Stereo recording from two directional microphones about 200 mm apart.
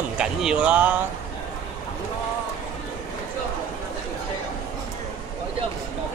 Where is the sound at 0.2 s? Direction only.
5° right (ahead or behind).